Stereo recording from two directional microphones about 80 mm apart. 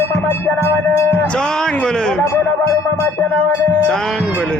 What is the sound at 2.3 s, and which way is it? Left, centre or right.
Music, left.